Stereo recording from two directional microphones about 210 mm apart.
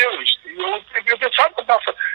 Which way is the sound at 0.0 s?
50° right (ahead or behind).